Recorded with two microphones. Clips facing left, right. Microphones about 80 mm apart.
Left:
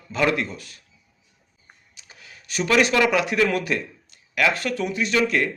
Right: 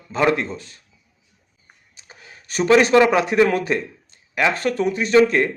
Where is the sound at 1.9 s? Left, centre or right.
Right.